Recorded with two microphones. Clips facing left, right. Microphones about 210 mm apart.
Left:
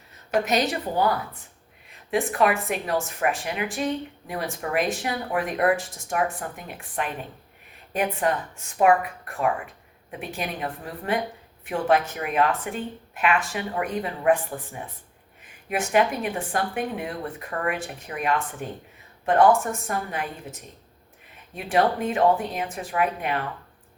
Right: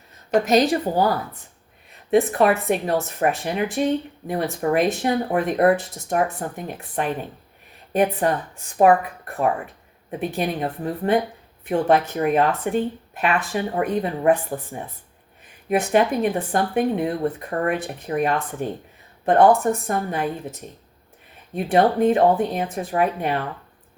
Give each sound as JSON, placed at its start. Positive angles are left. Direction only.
{"t": 0.4, "sound": "a woman's voice", "side_deg": -40}
{"t": 2.0, "sound": "a woman's voice", "side_deg": -40}